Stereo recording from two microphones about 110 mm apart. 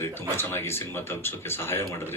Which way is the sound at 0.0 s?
20° left (ahead or behind).